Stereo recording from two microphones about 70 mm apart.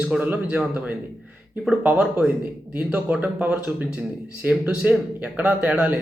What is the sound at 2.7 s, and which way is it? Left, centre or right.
A man's voice, right.